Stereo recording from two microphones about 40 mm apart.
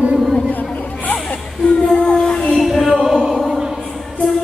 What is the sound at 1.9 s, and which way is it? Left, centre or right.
Child singing, centre.